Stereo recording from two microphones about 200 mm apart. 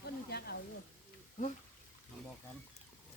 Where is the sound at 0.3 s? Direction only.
50° left (ahead or behind).